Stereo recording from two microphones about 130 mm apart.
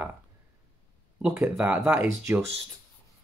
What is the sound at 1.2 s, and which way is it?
Speech, 10° right (ahead or behind).